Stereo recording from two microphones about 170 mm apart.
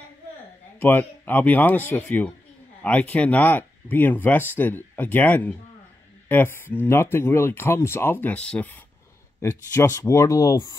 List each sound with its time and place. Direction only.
0.7 s speech: 10° left (ahead or behind)